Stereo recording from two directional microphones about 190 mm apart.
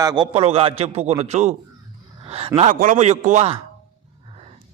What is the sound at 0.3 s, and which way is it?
A man's voice, 30° right (ahead or behind).